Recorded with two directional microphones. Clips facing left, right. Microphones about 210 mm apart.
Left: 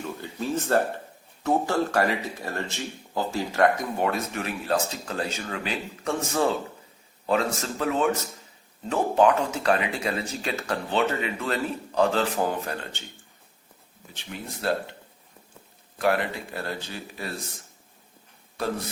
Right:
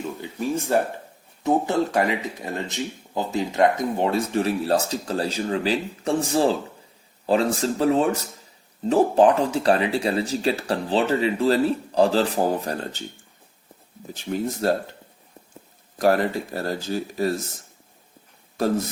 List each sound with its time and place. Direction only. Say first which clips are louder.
0.2 s speech: right 2 dB; 15° right (ahead or behind); by 13.0 s 35° right (ahead or behind)
14.1 s speech: right 11 dB; 40° right (ahead or behind)
16.0 s speech: right 5 dB; 40° right (ahead or behind)